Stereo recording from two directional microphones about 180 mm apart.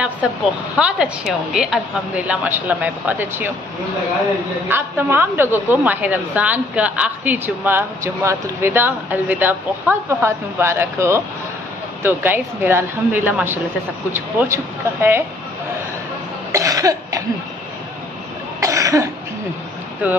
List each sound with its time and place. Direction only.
0.2 s a woman's voice: 5° right (ahead or behind)
4.6 s a woman's voice: 10° right (ahead or behind)
16.5 s cough: 20° right (ahead or behind)
18.6 s cough: 15° right (ahead or behind)
20.0 s a woman's voice: 10° right (ahead or behind)